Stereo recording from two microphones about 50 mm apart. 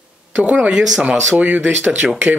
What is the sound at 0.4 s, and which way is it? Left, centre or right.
Speech, right.